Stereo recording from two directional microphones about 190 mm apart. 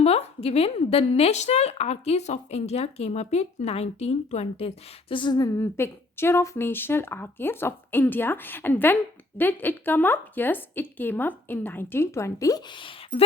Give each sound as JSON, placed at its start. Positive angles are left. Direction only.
{"t": 0.0, "sound": "a woman's voice", "side_deg": 35}